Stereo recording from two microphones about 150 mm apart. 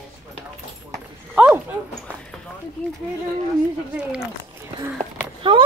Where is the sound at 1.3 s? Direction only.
10° right (ahead or behind).